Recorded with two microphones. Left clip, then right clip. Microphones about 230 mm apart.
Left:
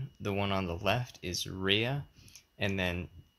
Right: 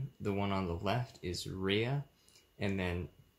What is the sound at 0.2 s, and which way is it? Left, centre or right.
Speech, left.